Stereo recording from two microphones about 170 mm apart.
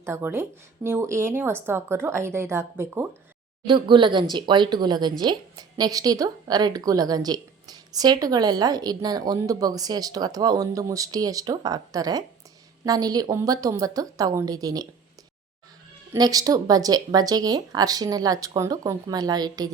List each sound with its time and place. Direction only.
0.0 s a woman's voice: 15° right (ahead or behind)
3.7 s a woman's voice: 30° right (ahead or behind)
16.1 s a woman's voice: 20° right (ahead or behind)